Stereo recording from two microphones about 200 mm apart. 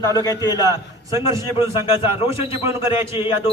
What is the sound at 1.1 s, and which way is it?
Speech, 15° right (ahead or behind).